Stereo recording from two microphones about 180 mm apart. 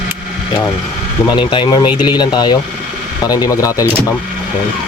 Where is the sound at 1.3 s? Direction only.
25° left (ahead or behind).